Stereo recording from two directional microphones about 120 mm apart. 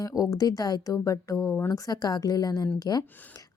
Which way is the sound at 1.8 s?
30° left (ahead or behind).